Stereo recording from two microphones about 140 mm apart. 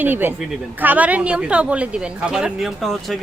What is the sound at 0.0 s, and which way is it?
Speech, 15° right (ahead or behind).